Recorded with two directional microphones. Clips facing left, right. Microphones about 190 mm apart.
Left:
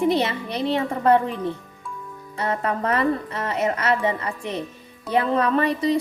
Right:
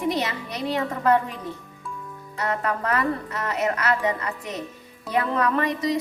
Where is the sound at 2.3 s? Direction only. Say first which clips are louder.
Left 2 dB; 30° left (ahead or behind).